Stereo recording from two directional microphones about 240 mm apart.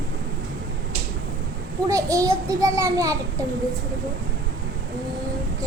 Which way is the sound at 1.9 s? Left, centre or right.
Centre.